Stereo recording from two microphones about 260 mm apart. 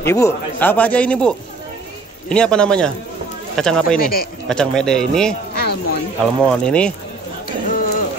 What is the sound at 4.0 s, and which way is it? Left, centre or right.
Speech, left.